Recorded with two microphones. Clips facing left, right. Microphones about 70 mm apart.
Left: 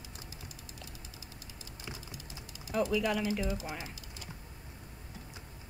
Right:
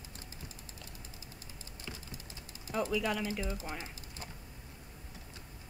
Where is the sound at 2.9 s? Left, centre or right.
Centre.